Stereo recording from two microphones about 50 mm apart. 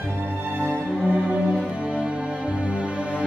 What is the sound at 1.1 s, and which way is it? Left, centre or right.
Music, right.